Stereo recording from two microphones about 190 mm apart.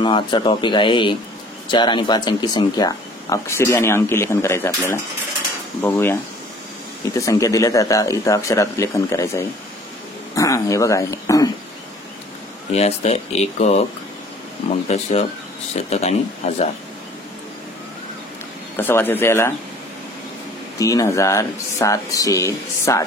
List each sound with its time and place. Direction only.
0.0 s speech: 25° left (ahead or behind)
5.8 s speech: 10° left (ahead or behind)
7.2 s speech: 15° left (ahead or behind)
12.7 s speech: 35° left (ahead or behind)
14.9 s speech: 35° left (ahead or behind)
18.8 s speech: 10° left (ahead or behind)
20.8 s speech: 15° left (ahead or behind)